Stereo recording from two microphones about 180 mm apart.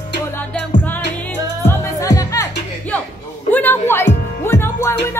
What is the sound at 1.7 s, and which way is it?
Music, 20° left (ahead or behind).